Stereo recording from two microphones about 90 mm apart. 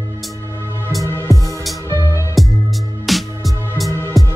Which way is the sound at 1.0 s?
25° left (ahead or behind).